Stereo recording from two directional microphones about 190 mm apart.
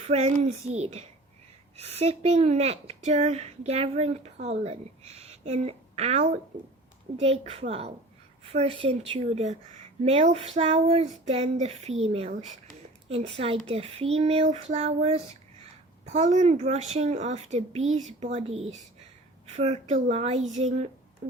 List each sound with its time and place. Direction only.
0.1 s speech: 35° right (ahead or behind)